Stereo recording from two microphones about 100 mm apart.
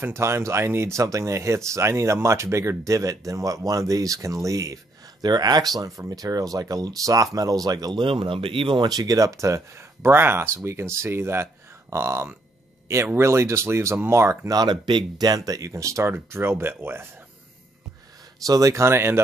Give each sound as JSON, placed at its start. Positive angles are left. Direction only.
{"t": 0.0, "sound": "speech", "side_deg": -25}
{"t": 8.0, "sound": "speech", "side_deg": -60}
{"t": 8.8, "sound": "speech", "side_deg": -40}
{"t": 14.5, "sound": "speech", "side_deg": -45}
{"t": 18.4, "sound": "speech", "side_deg": -35}